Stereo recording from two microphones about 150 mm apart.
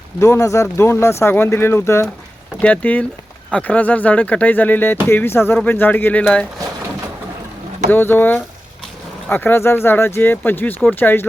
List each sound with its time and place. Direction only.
0.2 s speech: 20° left (ahead or behind)
7.9 s speech: 15° left (ahead or behind)